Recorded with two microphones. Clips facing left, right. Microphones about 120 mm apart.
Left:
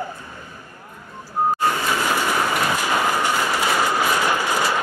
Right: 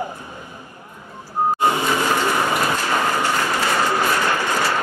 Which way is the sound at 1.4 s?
25° right (ahead or behind).